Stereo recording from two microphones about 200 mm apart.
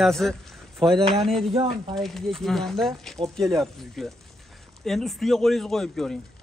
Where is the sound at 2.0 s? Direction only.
Centre (ahead or behind).